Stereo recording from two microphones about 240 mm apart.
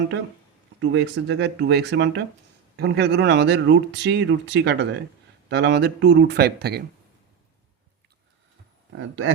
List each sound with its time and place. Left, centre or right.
0.8 s speech: right
9.0 s speech: right